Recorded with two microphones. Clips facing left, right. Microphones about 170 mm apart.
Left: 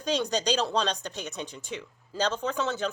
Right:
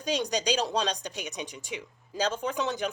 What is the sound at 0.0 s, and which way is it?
Speech, 10° right (ahead or behind).